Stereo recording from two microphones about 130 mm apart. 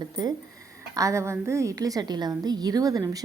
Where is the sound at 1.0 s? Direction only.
25° right (ahead or behind).